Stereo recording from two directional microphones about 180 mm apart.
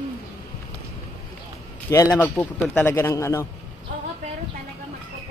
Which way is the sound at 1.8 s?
15° left (ahead or behind).